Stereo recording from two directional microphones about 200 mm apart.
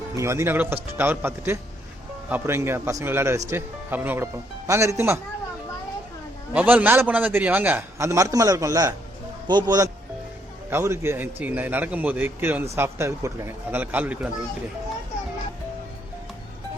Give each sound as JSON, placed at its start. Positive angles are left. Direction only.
{"t": 0.2, "sound": "a man's voice", "side_deg": -15}
{"t": 6.5, "sound": "a man's voice", "side_deg": -10}